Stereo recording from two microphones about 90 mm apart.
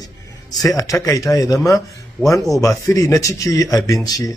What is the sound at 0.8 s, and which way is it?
Speech, 35° left (ahead or behind).